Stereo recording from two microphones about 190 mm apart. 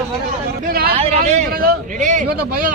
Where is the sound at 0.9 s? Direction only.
35° right (ahead or behind).